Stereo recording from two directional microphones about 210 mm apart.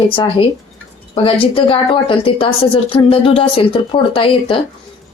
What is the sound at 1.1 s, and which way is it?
A woman's voice, 25° left (ahead or behind).